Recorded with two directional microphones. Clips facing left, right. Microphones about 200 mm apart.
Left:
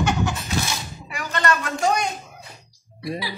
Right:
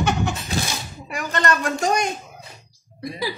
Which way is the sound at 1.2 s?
45° right (ahead or behind).